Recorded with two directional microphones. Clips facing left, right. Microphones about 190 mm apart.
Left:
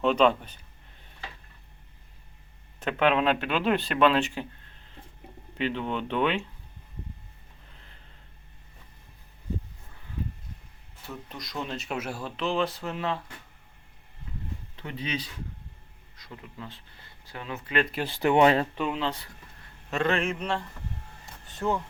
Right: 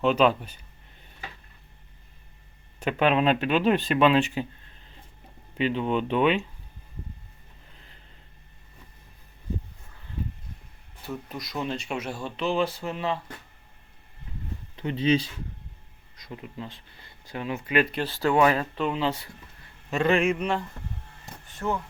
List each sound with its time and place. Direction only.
0.0 s speech: 5° right (ahead or behind)
2.8 s speech: 15° right (ahead or behind)
5.5 s speech: 15° right (ahead or behind)
11.1 s speech: 5° right (ahead or behind)
14.8 s speech: 25° right (ahead or behind)
16.1 s speech: 15° right (ahead or behind)
18.0 s speech: 20° left (ahead or behind)
18.9 s speech: 5° right (ahead or behind)